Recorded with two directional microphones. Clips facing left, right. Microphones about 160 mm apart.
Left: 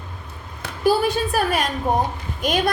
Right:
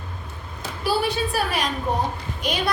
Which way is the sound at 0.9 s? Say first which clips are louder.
Left 5 dB; 45° left (ahead or behind).